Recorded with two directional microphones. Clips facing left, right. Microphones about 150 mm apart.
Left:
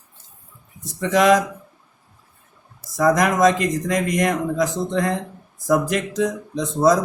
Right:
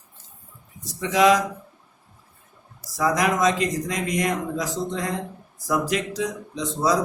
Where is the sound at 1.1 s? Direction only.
50° left (ahead or behind).